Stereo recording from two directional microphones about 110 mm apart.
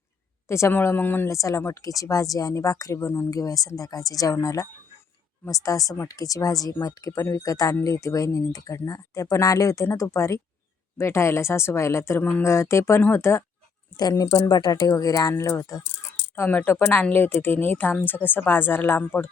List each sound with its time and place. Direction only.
0.4 s speech: 25° left (ahead or behind)
13.9 s speech: 35° left (ahead or behind)
16.3 s speech: 15° left (ahead or behind)